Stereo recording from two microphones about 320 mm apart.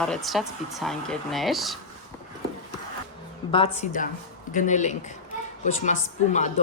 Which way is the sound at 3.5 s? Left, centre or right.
Centre.